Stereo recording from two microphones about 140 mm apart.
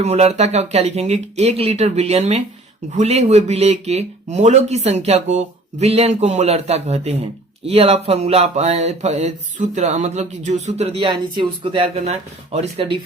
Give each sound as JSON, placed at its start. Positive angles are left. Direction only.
{"t": 0.0, "sound": "speech", "side_deg": -50}